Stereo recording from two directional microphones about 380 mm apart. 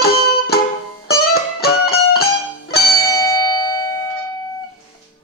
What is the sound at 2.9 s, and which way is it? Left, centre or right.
Bell, centre.